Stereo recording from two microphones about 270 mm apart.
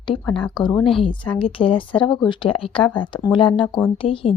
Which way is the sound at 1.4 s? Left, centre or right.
Centre.